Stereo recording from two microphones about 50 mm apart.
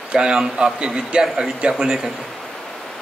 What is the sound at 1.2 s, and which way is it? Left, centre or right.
Speech, centre.